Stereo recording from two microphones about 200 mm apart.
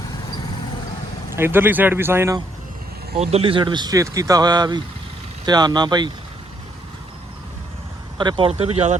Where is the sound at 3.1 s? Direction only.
30° right (ahead or behind).